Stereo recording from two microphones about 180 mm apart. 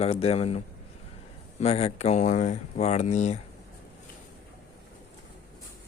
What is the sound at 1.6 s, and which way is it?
Speech, 35° left (ahead or behind).